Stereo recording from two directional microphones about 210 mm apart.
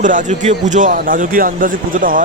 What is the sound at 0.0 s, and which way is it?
A man's voice, 40° right (ahead or behind).